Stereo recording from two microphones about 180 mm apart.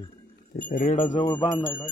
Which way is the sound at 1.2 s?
25° left (ahead or behind).